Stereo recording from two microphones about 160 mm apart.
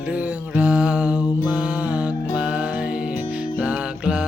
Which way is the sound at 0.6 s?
10° right (ahead or behind).